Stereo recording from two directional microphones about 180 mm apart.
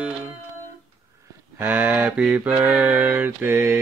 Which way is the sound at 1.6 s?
10° right (ahead or behind).